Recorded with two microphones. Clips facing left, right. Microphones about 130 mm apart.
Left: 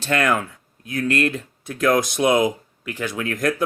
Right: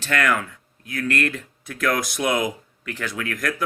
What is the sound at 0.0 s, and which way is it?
Speech, 25° left (ahead or behind).